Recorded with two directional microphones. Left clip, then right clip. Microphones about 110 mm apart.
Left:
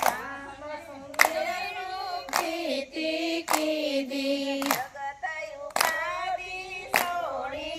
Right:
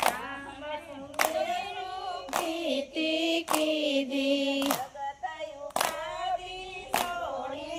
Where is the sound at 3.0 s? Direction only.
15° right (ahead or behind).